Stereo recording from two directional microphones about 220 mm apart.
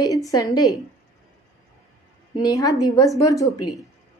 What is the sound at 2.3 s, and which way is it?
Speech, 15° left (ahead or behind).